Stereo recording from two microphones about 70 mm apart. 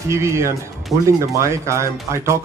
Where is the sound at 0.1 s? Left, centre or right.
Right.